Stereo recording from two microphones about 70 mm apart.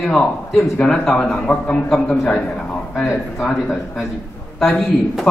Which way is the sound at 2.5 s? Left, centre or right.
Centre.